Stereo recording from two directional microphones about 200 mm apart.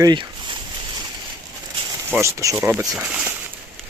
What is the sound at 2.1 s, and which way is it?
Speech, 15° right (ahead or behind).